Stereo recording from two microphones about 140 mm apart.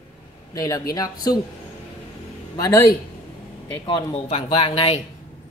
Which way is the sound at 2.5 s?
25° left (ahead or behind).